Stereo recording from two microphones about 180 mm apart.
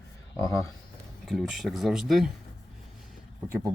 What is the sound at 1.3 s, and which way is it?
Speech, centre (ahead or behind).